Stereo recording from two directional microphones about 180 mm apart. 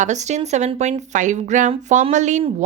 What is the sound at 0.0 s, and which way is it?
Speech, 40° right (ahead or behind).